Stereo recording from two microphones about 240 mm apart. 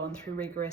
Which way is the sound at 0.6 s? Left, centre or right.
Right.